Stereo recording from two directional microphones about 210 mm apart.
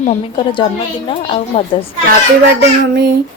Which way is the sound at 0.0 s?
30° left (ahead or behind).